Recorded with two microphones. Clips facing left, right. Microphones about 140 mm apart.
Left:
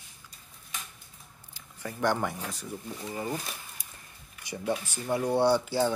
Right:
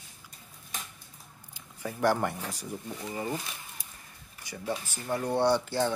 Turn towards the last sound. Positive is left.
turn(degrees=5)  # may be behind; listen again after turning